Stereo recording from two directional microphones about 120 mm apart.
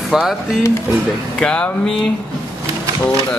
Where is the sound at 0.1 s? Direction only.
5° right (ahead or behind).